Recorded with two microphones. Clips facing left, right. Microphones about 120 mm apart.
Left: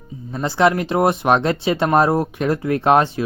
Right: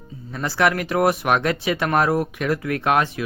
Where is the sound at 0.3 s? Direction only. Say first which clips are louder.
Left 4 dB; 25° left (ahead or behind).